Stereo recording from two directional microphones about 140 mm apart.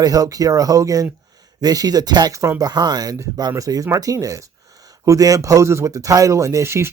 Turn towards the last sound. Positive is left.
turn(degrees=-20)  # may be behind; listen again after turning